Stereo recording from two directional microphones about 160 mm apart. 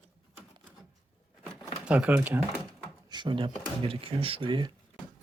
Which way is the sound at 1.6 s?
5° right (ahead or behind).